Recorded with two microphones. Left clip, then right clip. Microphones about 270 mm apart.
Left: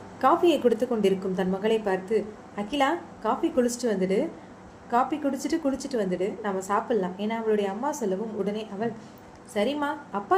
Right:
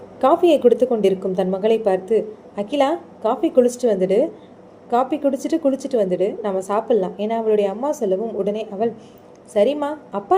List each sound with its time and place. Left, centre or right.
0.2 s a woman's voice: centre